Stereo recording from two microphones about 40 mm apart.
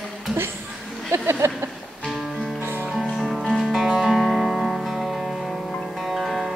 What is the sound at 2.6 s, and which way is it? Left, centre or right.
Music, right.